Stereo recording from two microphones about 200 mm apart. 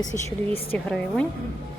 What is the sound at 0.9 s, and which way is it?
Speech, 5° left (ahead or behind).